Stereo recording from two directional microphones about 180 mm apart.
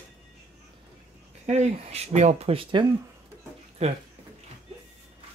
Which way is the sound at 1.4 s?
40° right (ahead or behind).